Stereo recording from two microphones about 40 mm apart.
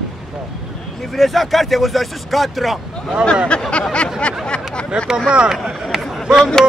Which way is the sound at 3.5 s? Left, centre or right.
Left.